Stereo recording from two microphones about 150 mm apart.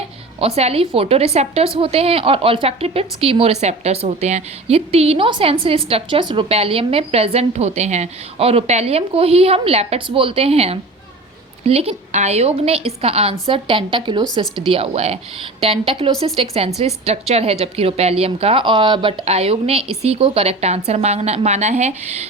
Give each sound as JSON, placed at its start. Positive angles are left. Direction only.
{"t": 0.3, "sound": "a woman's voice", "side_deg": -40}